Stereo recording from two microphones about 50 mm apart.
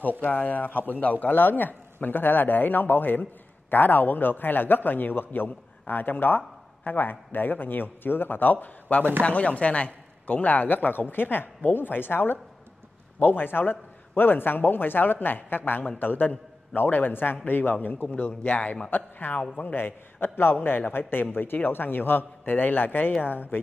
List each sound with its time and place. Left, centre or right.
0.2 s a man's voice: left